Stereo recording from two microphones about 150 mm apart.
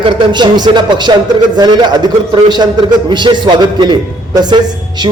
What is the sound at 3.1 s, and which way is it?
Speech, 30° right (ahead or behind).